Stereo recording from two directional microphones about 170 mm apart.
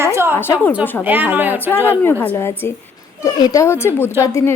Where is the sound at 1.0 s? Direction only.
10° right (ahead or behind).